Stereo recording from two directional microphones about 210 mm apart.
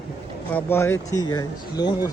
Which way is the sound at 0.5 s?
10° left (ahead or behind).